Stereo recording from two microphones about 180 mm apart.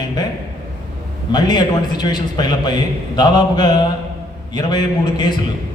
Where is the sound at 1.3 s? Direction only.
25° left (ahead or behind).